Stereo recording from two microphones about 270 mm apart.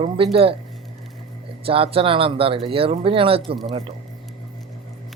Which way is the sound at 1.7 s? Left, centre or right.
Right.